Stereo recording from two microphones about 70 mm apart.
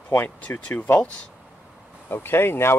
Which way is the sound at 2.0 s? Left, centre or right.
Left.